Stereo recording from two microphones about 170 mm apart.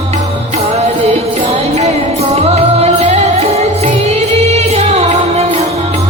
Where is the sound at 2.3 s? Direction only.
40° right (ahead or behind).